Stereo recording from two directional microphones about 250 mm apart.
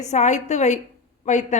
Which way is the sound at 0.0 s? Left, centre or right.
Left.